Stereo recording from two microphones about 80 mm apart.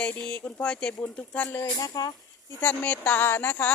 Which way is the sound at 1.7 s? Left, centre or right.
Left.